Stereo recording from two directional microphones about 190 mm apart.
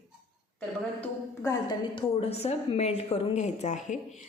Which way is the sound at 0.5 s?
10° left (ahead or behind).